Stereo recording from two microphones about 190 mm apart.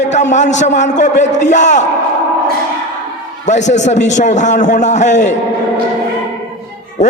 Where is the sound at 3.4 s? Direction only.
40° left (ahead or behind).